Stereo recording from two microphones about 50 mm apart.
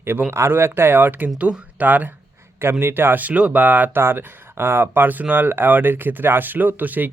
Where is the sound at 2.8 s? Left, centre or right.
Right.